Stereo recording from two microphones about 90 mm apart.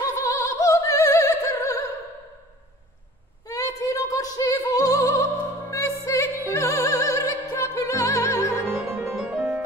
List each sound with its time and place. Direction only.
0.4 s opera: 35° left (ahead or behind)
3.4 s opera: 40° left (ahead or behind)
6.0 s music: 30° left (ahead or behind)
8.6 s music: 25° right (ahead or behind)